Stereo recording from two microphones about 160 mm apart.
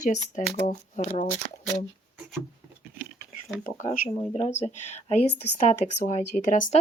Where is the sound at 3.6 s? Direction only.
55° left (ahead or behind).